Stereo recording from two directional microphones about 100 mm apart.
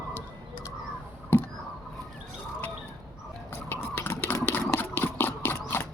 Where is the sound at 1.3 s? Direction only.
20° left (ahead or behind).